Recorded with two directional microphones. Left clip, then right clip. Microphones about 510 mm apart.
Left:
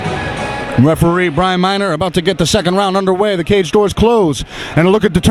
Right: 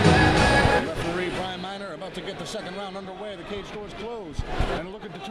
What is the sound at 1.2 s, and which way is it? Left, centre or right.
A man's voice, left.